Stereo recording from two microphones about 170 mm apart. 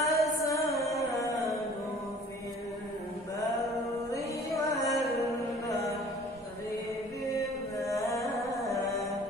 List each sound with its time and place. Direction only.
0.0 s music: 20° left (ahead or behind)
4.1 s music: 20° left (ahead or behind)
7.3 s music: 20° left (ahead or behind)